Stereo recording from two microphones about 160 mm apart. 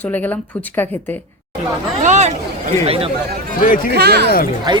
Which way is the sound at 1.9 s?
45° right (ahead or behind).